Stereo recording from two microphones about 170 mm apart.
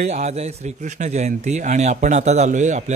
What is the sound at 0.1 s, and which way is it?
A man's voice, 40° right (ahead or behind).